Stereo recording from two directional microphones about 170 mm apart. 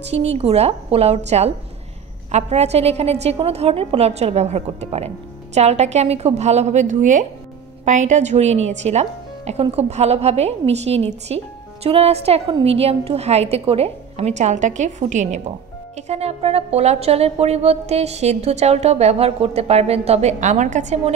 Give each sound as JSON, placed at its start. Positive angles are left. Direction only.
{"t": 0.1, "sound": "speech", "side_deg": -40}